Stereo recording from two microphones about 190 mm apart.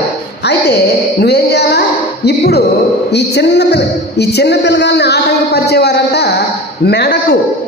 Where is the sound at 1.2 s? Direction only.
60° left (ahead or behind).